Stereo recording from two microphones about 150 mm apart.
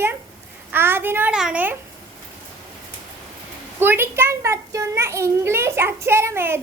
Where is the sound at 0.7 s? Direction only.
15° right (ahead or behind).